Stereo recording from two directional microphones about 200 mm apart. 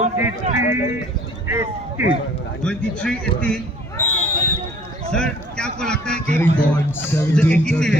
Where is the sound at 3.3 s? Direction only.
5° left (ahead or behind).